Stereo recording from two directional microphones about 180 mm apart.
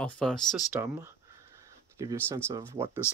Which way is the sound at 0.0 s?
5° left (ahead or behind).